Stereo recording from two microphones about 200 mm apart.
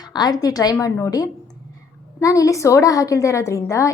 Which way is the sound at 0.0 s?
20° left (ahead or behind).